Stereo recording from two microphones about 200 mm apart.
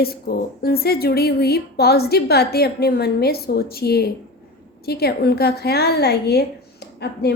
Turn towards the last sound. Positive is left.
turn(degrees=55)  # may be behind; listen again after turning